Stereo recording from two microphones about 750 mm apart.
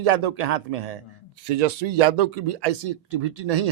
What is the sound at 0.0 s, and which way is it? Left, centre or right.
Speech, right.